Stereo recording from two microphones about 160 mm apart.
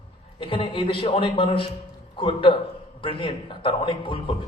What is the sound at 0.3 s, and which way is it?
A man's voice, 35° left (ahead or behind).